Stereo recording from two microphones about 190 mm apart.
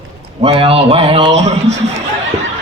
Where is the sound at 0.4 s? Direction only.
30° right (ahead or behind).